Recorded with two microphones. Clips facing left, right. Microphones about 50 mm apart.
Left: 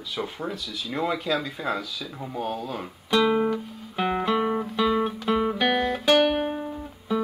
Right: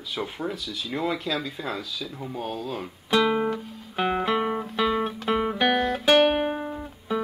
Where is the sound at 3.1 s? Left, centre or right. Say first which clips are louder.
Left 1 dB; centre.